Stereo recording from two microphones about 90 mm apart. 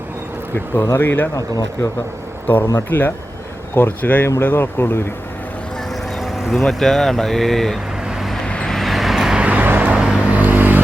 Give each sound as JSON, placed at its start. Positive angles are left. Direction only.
{"t": 0.5, "sound": "speech", "side_deg": 25}
{"t": 2.7, "sound": "speech", "side_deg": 20}
{"t": 6.1, "sound": "speech", "side_deg": 0}
{"t": 8.0, "sound": "vehicle", "side_deg": 0}